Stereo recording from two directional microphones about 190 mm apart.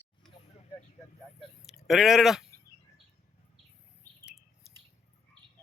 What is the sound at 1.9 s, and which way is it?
Speech, centre (ahead or behind).